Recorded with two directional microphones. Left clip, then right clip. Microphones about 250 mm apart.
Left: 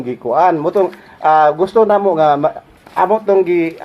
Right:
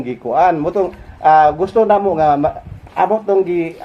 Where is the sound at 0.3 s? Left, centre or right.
Left.